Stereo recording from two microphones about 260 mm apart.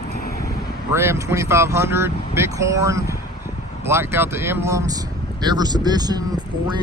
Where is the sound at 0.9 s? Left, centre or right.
Centre.